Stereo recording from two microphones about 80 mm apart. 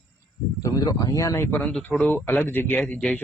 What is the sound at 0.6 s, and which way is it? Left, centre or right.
Speech, left.